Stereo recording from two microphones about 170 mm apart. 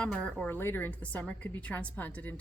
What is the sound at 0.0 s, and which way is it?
A woman's voice, 5° left (ahead or behind).